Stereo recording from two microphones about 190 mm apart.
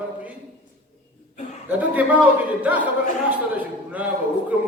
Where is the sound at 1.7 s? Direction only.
10° right (ahead or behind).